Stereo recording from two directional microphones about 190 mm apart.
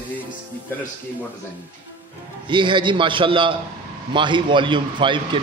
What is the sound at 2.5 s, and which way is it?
A man's voice, 25° right (ahead or behind).